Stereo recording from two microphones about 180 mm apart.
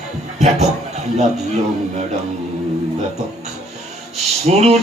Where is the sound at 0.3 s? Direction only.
40° right (ahead or behind).